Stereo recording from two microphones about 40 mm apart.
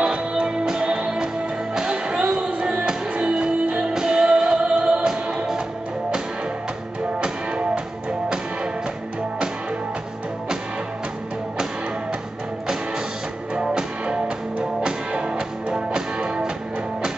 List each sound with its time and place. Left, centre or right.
0.0 s music: right
3.9 s music: centre
7.2 s music: right
13.6 s music: right